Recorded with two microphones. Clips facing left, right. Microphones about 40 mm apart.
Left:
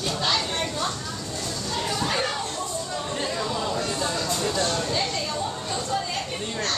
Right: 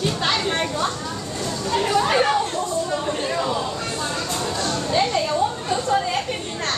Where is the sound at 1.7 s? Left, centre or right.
Right.